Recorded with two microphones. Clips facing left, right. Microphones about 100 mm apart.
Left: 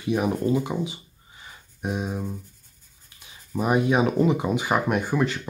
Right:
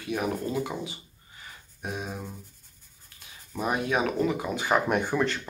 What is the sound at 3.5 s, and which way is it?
Speech, 15° left (ahead or behind).